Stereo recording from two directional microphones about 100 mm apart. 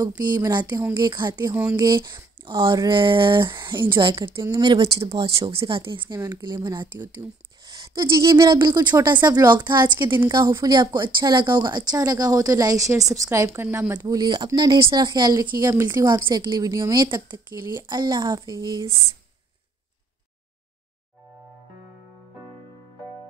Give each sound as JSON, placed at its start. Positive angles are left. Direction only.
{"t": 0.2, "sound": "a woman's voice", "side_deg": -40}
{"t": 1.5, "sound": "speech", "side_deg": -20}
{"t": 1.8, "sound": "a woman's voice", "side_deg": -45}
{"t": 4.4, "sound": "speech", "side_deg": -35}
{"t": 4.6, "sound": "speech", "side_deg": -60}
{"t": 6.1, "sound": "a woman's voice", "side_deg": -35}
{"t": 10.3, "sound": "speech", "side_deg": -35}
{"t": 13.9, "sound": "a woman's voice", "side_deg": -40}
{"t": 17.0, "sound": "a woman's voice", "side_deg": -45}